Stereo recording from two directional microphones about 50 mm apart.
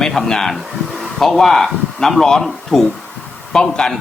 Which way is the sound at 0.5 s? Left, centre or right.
Centre.